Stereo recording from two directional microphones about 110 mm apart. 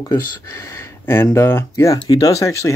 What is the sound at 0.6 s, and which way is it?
Speech, 25° left (ahead or behind).